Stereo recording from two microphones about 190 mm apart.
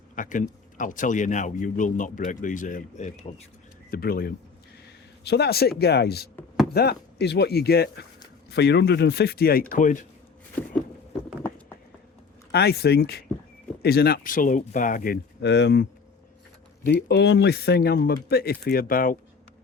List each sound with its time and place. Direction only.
0.2 s speech: 45° left (ahead or behind)
3.9 s speech: 50° left (ahead or behind)
12.5 s speech: 60° left (ahead or behind)
16.9 s speech: 65° left (ahead or behind); by 19.1 s 50° left (ahead or behind)